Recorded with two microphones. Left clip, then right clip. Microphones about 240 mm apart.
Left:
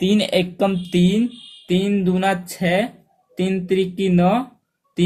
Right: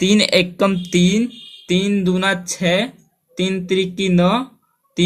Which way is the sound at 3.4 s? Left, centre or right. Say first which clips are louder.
Right 1 dB; centre.